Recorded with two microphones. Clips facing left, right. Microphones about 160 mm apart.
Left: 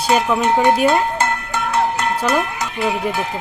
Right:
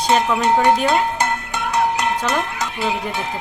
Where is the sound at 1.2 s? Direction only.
15° right (ahead or behind).